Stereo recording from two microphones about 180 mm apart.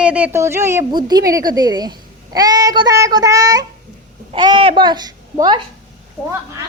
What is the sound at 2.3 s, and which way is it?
Child singing, 20° right (ahead or behind).